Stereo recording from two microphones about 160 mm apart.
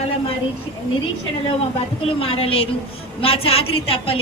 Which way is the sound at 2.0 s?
35° left (ahead or behind).